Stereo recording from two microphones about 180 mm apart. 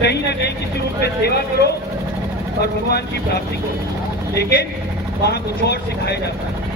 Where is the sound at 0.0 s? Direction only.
65° left (ahead or behind).